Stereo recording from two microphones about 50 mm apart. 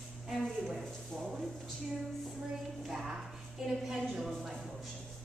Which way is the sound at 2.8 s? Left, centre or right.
Centre.